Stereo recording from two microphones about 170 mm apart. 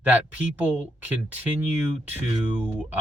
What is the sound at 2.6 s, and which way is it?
Speech, 10° right (ahead or behind).